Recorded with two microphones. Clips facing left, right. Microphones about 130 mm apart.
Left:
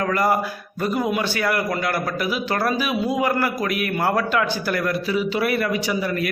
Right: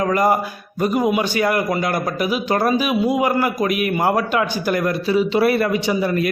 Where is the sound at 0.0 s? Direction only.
20° right (ahead or behind).